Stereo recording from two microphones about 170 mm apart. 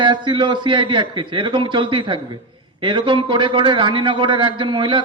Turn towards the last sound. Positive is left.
turn(degrees=-30)  # may be behind; listen again after turning